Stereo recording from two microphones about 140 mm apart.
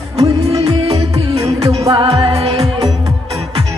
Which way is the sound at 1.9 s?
40° right (ahead or behind).